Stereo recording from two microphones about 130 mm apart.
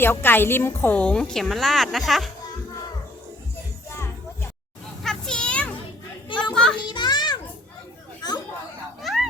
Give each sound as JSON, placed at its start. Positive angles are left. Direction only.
{"t": 0.0, "sound": "a woman's voice", "side_deg": 15}
{"t": 5.0, "sound": "children playing", "side_deg": 5}
{"t": 6.2, "sound": "children playing", "side_deg": 40}
{"t": 6.5, "sound": "children playing", "side_deg": 5}
{"t": 6.7, "sound": "children playing", "side_deg": 35}
{"t": 9.0, "sound": "a sound", "side_deg": 0}